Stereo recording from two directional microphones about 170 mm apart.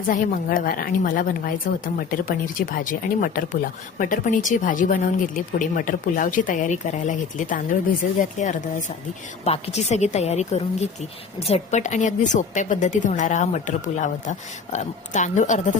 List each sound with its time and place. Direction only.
0.1 s a woman's voice: 55° left (ahead or behind)